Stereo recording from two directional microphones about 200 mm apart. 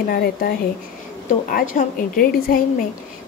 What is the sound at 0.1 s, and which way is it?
A woman's voice, 50° left (ahead or behind).